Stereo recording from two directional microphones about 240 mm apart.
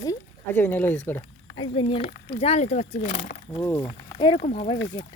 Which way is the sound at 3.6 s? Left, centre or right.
Centre.